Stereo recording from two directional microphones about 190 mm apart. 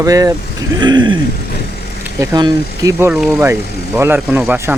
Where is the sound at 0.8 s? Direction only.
25° right (ahead or behind).